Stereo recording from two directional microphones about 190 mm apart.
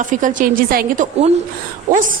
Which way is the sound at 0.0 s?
45° right (ahead or behind).